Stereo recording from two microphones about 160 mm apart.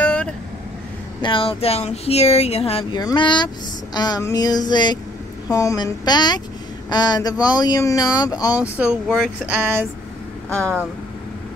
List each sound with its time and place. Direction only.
0.0 s vehicle: 5° left (ahead or behind)
1.2 s speech: 35° left (ahead or behind)
3.0 s speech: 25° left (ahead or behind)
8.5 s speech: 10° right (ahead or behind)
10.5 s speech: 5° left (ahead or behind)